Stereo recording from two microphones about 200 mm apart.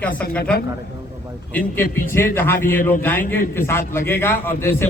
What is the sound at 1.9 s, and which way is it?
A man's voice, 10° left (ahead or behind).